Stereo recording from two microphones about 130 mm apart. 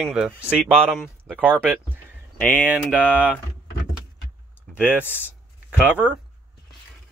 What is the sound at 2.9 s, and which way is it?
Speech, 10° right (ahead or behind).